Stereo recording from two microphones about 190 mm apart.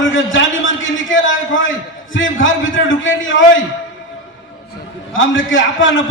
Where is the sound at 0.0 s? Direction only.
90° left.